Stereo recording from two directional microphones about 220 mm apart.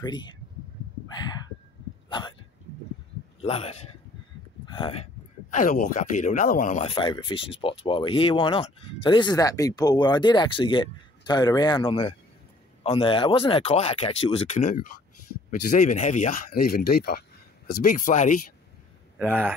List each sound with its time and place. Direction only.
0.0 s speech: 20° left (ahead or behind)
2.0 s hiccup: 20° left (ahead or behind)
3.4 s speech: 25° left (ahead or behind)
4.6 s a sound: 20° left (ahead or behind)
5.5 s speech: 35° left (ahead or behind)
19.1 s speech: 5° right (ahead or behind)